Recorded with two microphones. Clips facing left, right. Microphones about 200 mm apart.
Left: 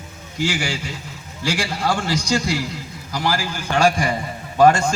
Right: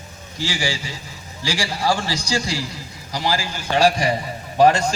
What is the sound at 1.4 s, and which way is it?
A man's voice, 55° left (ahead or behind).